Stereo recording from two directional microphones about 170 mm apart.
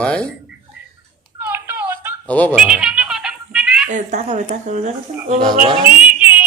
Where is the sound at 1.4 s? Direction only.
10° right (ahead or behind).